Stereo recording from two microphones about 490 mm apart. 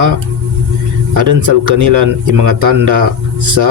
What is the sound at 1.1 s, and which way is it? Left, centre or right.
A man's voice, right.